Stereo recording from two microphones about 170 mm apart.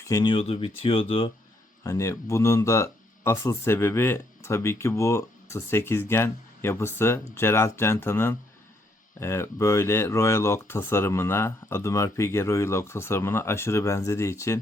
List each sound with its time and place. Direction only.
0.0 s speech: 20° left (ahead or behind)
1.8 s speech: 20° left (ahead or behind)